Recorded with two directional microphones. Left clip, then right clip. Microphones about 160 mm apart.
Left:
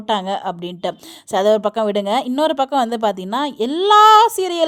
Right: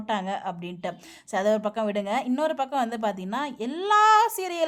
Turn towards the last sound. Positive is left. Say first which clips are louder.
# left 9 dB
turn(degrees=35)  # may be behind; listen again after turning